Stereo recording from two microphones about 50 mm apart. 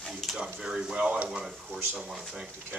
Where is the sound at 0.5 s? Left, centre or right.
Centre.